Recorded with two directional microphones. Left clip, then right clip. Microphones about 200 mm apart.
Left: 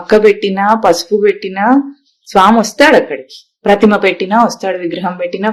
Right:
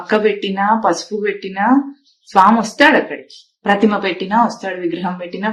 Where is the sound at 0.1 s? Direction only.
50° left (ahead or behind).